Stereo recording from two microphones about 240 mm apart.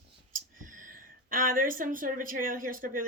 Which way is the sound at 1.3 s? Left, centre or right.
Right.